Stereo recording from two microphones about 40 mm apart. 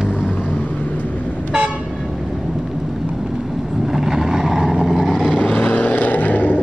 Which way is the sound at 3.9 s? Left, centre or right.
Centre.